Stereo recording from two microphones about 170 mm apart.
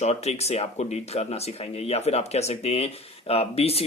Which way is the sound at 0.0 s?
40° left (ahead or behind).